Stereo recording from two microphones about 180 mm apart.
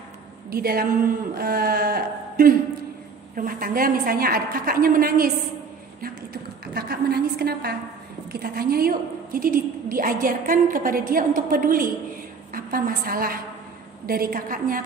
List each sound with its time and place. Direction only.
0.5 s a woman's voice: 55° right (ahead or behind)
6.6 s a woman's voice: 60° right (ahead or behind)